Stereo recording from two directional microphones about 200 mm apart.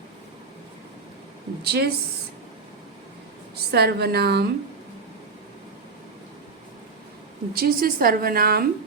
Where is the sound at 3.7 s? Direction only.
55° right (ahead or behind).